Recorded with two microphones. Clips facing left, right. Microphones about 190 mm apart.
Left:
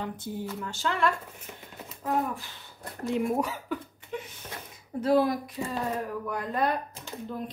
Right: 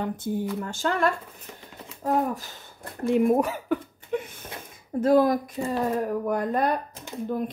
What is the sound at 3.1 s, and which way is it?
Speech, 55° right (ahead or behind).